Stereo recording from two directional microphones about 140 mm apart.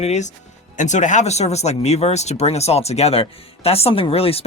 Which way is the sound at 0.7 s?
60° left (ahead or behind).